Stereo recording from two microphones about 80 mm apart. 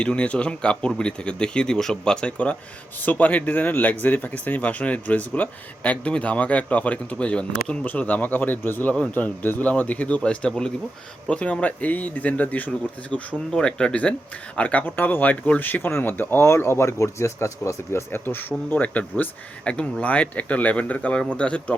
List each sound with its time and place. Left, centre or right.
0.0 s speech: centre